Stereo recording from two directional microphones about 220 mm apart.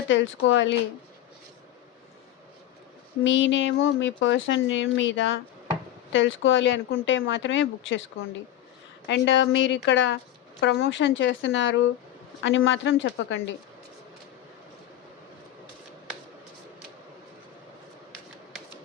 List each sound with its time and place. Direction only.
0.1 s speech: 55° left (ahead or behind)
3.2 s speech: 60° left (ahead or behind)
9.0 s speech: 55° left (ahead or behind)